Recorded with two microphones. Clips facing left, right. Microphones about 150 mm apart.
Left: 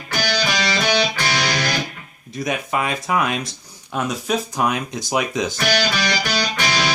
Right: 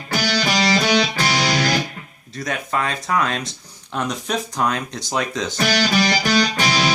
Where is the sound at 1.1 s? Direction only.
30° right (ahead or behind).